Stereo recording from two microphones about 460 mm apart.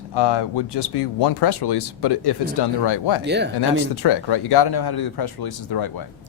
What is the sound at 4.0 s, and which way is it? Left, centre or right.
Speech, left.